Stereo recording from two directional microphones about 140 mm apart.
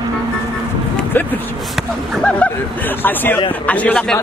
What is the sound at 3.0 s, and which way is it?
A man's voice, 15° left (ahead or behind).